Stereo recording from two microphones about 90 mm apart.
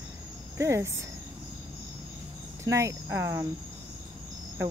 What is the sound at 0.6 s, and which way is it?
Speech, 30° right (ahead or behind).